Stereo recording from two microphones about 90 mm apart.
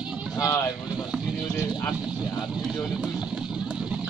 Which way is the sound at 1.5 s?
35° left (ahead or behind).